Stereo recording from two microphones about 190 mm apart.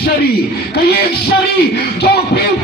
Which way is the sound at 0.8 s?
55° left (ahead or behind).